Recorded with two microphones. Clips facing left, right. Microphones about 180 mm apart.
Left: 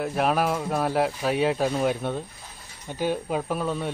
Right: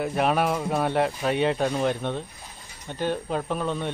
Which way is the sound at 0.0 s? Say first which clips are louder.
Even; centre (ahead or behind).